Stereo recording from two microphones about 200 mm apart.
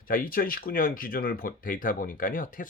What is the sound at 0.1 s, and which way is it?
Speech, 45° left (ahead or behind).